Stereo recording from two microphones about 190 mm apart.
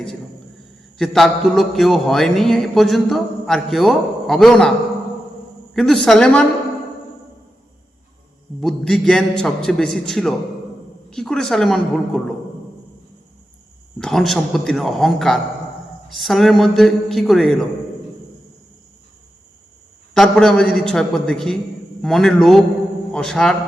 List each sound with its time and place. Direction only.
0.9 s a man's voice: centre (ahead or behind)
5.7 s a man's voice: centre (ahead or behind)
8.6 s a man's voice: centre (ahead or behind)
14.0 s a man's voice: centre (ahead or behind)
20.1 s a man's voice: centre (ahead or behind)